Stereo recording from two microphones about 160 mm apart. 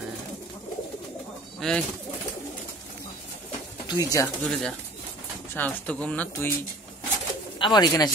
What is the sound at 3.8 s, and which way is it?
Speech, 25° left (ahead or behind).